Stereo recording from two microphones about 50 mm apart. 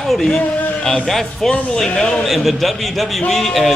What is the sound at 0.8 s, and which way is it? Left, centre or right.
Music, centre.